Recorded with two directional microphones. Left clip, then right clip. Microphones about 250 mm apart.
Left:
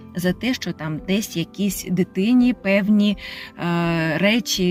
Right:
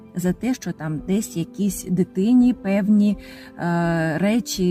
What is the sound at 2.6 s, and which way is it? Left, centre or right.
Speech, centre.